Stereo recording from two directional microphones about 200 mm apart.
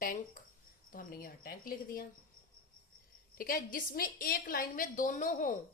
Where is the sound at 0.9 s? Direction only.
45° left (ahead or behind).